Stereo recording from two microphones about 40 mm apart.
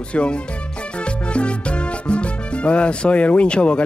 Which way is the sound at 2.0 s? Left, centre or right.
Left.